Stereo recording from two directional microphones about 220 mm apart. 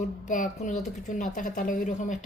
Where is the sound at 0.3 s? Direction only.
35° left (ahead or behind).